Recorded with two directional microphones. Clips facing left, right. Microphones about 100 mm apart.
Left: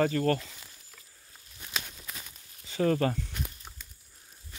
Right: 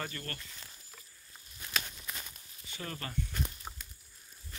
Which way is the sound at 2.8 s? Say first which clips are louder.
Left 17 dB; 90° left.